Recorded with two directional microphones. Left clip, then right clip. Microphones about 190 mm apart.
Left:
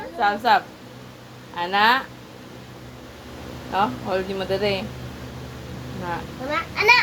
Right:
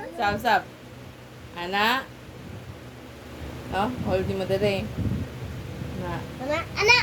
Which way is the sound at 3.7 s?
20° right (ahead or behind).